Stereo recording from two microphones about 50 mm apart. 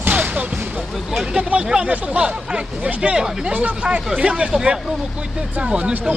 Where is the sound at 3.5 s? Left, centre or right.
Right.